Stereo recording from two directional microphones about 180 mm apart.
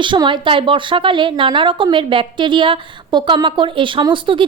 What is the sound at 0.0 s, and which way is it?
A woman's voice, 25° right (ahead or behind).